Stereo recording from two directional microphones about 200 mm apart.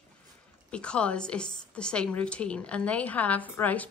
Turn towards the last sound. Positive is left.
turn(degrees=10)  # may be behind; listen again after turning